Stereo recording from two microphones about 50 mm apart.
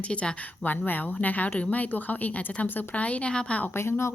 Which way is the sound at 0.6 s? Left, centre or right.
Left.